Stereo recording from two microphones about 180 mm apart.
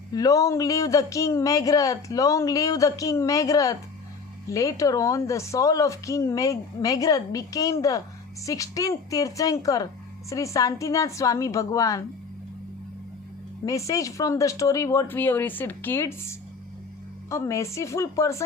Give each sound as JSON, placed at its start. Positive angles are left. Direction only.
{"t": 0.1, "sound": "a woman's voice", "side_deg": 20}
{"t": 13.7, "sound": "a woman's voice", "side_deg": 20}